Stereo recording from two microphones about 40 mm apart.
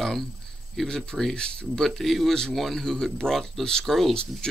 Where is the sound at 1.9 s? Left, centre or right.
Centre.